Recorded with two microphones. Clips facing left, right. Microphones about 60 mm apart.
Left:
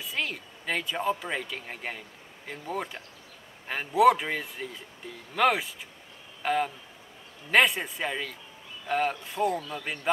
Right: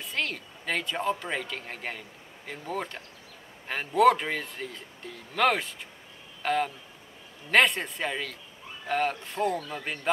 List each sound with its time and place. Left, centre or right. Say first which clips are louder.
0.0 s speech: right 1 dB; centre
9.6 s speech: even; right